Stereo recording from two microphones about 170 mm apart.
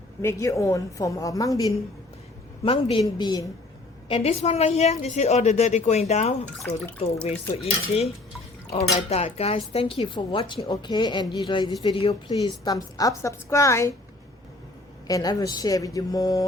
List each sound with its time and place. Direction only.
0.2 s a woman's voice: 15° left (ahead or behind)
2.6 s a woman's voice: 30° left (ahead or behind)
4.1 s a woman's voice: 35° left (ahead or behind)
6.6 s speech: 5° left (ahead or behind)
7.3 s a woman's voice: 35° left (ahead or behind); by 13.9 s 15° left (ahead or behind)
15.0 s a woman's voice: 20° left (ahead or behind)